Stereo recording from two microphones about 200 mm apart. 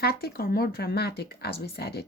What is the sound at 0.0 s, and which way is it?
A woman's voice, 50° left (ahead or behind).